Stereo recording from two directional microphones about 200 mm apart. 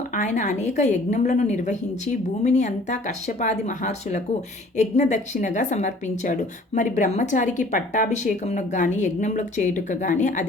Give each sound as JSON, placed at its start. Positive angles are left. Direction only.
{"t": 0.1, "sound": "a woman's voice", "side_deg": 40}